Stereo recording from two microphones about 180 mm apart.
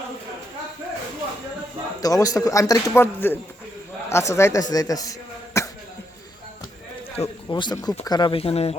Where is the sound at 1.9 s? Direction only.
20° left (ahead or behind).